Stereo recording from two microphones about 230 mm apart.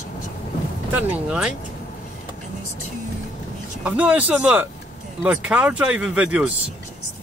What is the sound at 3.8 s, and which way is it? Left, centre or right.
Speech, centre.